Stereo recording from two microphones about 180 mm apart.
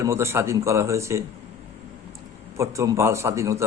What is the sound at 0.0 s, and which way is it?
Speech, 15° right (ahead or behind).